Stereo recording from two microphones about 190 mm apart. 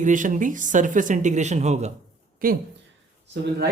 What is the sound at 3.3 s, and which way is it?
Speech, 60° right (ahead or behind).